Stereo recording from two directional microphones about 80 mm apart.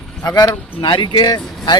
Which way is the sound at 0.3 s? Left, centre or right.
Left.